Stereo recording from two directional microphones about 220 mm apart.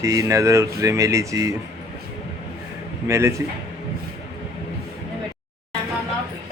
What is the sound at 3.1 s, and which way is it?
Speech, 15° right (ahead or behind).